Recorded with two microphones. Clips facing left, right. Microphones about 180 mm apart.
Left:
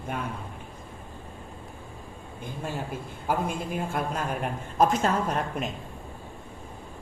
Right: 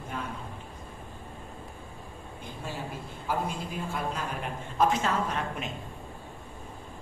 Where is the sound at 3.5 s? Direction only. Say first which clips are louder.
Left 4 dB; 50° left (ahead or behind).